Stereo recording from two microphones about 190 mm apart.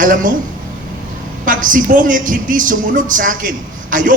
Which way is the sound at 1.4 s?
45° right (ahead or behind).